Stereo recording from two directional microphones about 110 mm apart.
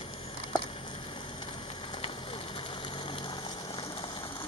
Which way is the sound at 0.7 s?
45° left (ahead or behind).